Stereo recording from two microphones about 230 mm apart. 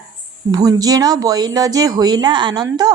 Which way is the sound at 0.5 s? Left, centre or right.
Centre.